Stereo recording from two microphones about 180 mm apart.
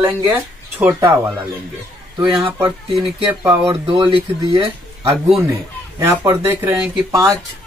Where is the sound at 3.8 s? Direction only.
25° right (ahead or behind).